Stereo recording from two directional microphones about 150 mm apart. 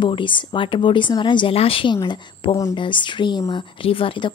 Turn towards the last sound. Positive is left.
turn(degrees=35)  # may be behind; listen again after turning